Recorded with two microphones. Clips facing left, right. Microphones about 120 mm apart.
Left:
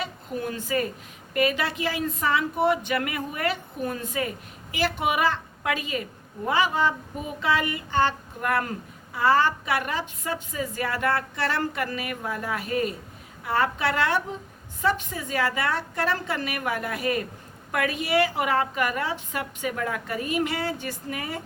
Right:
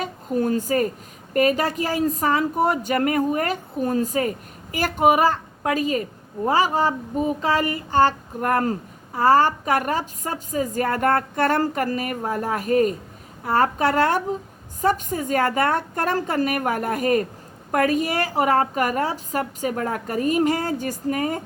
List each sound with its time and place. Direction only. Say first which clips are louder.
0.0 s a woman's voice: right 7 dB; 40° right (ahead or behind)